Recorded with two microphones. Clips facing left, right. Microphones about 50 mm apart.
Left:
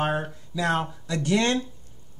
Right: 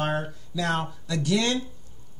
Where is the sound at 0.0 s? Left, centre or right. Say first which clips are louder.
Left 1 dB; centre.